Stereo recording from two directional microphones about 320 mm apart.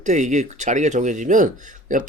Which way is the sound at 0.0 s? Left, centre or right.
Right.